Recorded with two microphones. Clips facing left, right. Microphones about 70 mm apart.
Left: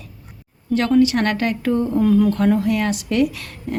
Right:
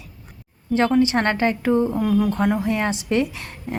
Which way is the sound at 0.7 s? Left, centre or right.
Right.